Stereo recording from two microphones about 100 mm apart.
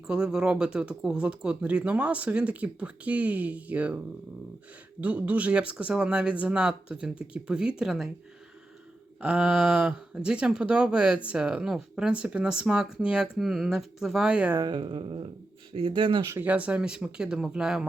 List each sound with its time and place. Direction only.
0.1 s speech: 5° right (ahead or behind)
9.2 s speech: 10° right (ahead or behind)
14.6 s speech: 50° right (ahead or behind)
16.3 s speech: 15° right (ahead or behind)